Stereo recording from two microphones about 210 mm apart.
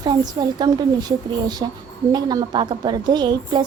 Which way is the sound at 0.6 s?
20° right (ahead or behind).